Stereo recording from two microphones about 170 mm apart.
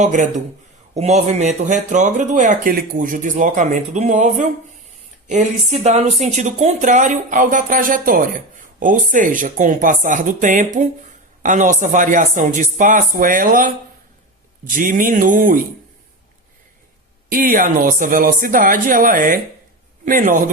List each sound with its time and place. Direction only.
0.0 s speech: 45° right (ahead or behind)
17.2 s speech: 55° right (ahead or behind)